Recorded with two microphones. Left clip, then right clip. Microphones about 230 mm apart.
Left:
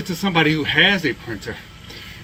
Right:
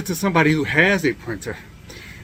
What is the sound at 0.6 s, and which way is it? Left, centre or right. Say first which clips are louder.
Speech: left 1 dB; centre.